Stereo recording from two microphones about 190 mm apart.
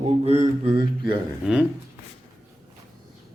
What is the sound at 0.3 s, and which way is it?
Mantra, 35° right (ahead or behind).